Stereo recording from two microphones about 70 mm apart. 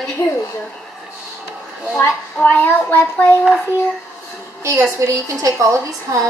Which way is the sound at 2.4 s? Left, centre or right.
Left.